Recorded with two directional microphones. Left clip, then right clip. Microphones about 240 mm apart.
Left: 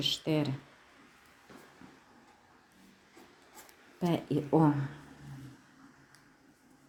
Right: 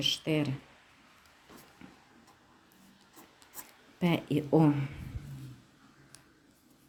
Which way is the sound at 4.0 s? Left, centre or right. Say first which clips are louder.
Right 1 dB; centre.